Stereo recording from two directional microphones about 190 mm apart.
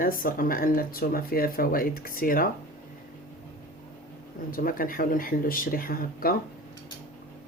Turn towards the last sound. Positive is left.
turn(degrees=50)  # may be behind; listen again after turning